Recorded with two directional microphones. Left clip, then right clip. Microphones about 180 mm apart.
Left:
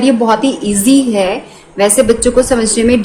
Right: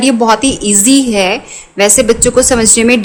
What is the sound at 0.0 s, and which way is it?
A woman's voice, 35° right (ahead or behind).